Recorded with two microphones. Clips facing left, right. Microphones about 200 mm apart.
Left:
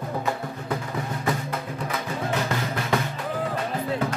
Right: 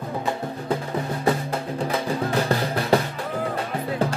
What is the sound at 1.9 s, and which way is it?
Music, 35° right (ahead or behind).